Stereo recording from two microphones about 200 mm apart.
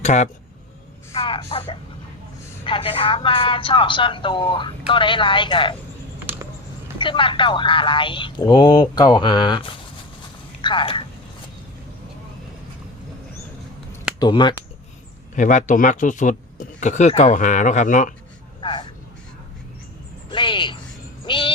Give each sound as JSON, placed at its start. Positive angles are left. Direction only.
{"t": 0.0, "sound": "speech", "side_deg": 35}
{"t": 7.0, "sound": "speech", "side_deg": 25}
{"t": 14.2, "sound": "speech", "side_deg": 20}
{"t": 15.4, "sound": "speech", "side_deg": 40}
{"t": 18.6, "sound": "vehicle", "side_deg": 25}
{"t": 20.3, "sound": "a sound", "side_deg": 25}
{"t": 21.2, "sound": "owl", "side_deg": 25}